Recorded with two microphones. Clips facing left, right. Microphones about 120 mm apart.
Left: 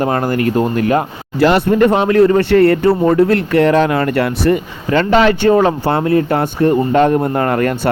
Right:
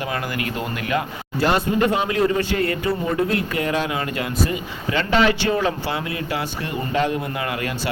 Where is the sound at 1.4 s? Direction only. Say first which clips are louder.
Left 8 dB; 65° left (ahead or behind).